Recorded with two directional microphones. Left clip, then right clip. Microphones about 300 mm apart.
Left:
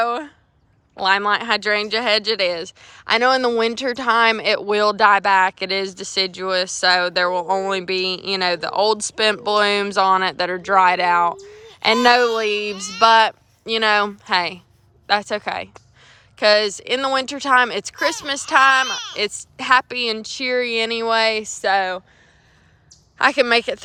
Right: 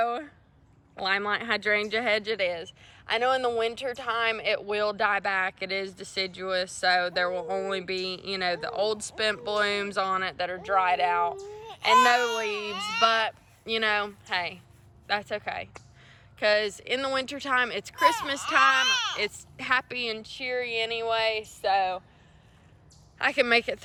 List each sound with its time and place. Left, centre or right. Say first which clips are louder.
0.0 s a sound: left 7 dB; centre
0.9 s speech: left 10 dB; centre
12.7 s speech: even; centre
13.0 s speech: left 11 dB; centre
21.7 s speech: left 6 dB; left
23.1 s speech: left 8 dB; centre